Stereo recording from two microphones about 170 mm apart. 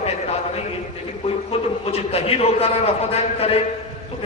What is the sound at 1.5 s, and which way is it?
A man's voice, 35° left (ahead or behind).